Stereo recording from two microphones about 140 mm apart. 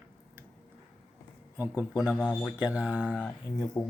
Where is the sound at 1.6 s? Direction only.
15° right (ahead or behind).